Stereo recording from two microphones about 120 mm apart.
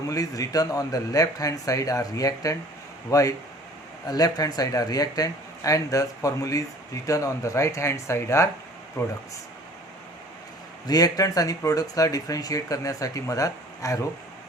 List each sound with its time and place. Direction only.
0.1 s speech: 30° left (ahead or behind)
10.8 s speech: 30° left (ahead or behind)